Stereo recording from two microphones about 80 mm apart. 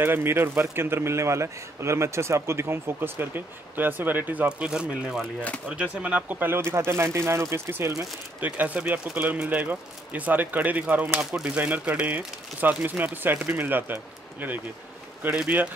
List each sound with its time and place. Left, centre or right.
0.0 s a man's voice: right
4.5 s a man's voice: centre; by 7.9 s right
8.4 s speech: centre